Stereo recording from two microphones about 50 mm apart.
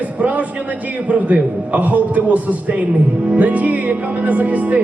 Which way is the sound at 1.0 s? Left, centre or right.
Right.